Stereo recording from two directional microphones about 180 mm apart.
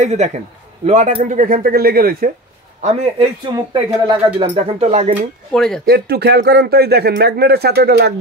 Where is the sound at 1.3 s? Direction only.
50° right (ahead or behind).